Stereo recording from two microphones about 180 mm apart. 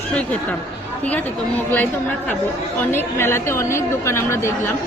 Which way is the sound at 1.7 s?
10° left (ahead or behind).